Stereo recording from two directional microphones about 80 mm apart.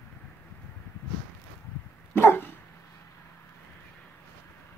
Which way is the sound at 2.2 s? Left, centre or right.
Left.